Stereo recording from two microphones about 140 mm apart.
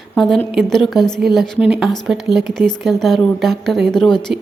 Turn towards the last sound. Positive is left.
turn(degrees=5)  # may be behind; listen again after turning